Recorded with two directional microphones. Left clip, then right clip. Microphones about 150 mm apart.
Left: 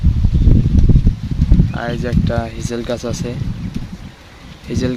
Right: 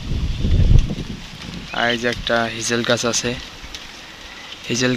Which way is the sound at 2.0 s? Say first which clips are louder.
Right 2 dB; 5° right (ahead or behind).